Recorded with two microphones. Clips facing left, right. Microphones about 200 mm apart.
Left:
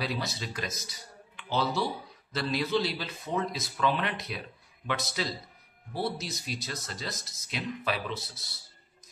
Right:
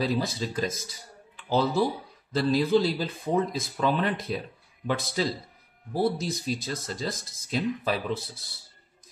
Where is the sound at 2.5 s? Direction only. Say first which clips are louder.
Right 5 dB; 40° right (ahead or behind).